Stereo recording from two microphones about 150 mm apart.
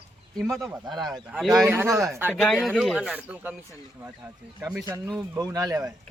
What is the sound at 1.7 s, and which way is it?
Speech, 15° right (ahead or behind).